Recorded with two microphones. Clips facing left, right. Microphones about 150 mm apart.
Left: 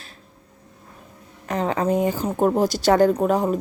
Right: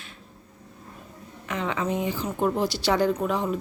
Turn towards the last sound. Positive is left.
turn(degrees=45)  # may be behind; listen again after turning